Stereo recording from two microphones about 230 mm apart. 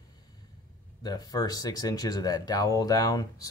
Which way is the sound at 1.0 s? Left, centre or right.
Centre.